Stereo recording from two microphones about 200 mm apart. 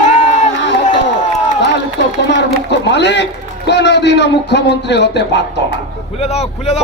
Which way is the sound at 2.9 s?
60° left (ahead or behind).